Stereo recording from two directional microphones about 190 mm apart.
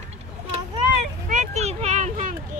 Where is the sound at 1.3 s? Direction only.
40° right (ahead or behind).